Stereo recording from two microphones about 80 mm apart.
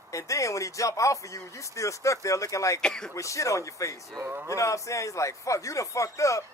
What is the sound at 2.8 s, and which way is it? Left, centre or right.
Speech, centre.